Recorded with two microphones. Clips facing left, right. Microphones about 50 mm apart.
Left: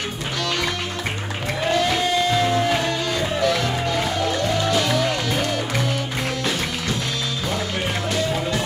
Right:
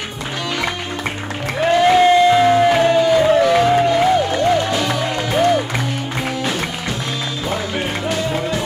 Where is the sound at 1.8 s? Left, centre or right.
Right.